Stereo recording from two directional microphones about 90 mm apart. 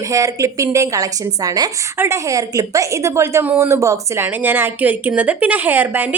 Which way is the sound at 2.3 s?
40° right (ahead or behind).